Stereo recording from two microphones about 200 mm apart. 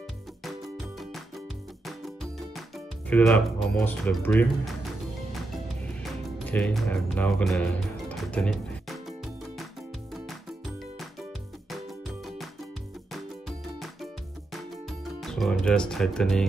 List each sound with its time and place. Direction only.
3.1 s speech: 5° left (ahead or behind)
6.5 s speech: 5° left (ahead or behind)
8.3 s music: 5° left (ahead or behind)
13.1 s music: centre (ahead or behind)